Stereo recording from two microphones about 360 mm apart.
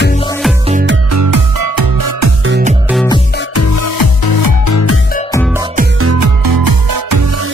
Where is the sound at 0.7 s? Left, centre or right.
Right.